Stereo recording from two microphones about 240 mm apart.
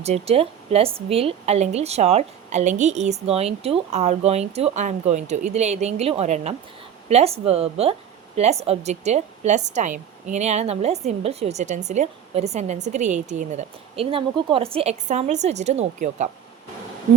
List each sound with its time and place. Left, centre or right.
0.0 s a woman's voice: right